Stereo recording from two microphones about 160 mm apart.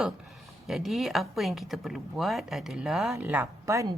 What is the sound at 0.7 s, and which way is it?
Speech, centre (ahead or behind).